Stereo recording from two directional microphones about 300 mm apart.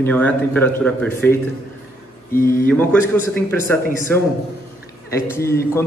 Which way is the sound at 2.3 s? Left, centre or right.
Left.